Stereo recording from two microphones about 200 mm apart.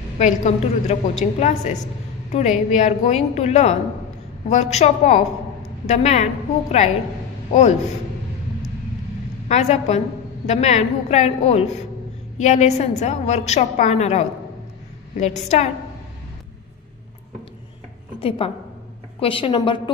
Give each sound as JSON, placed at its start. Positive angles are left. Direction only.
{"t": 0.2, "sound": "a woman's voice", "side_deg": 40}
{"t": 9.5, "sound": "a woman's voice", "side_deg": 35}
{"t": 18.4, "sound": "a woman's voice", "side_deg": 30}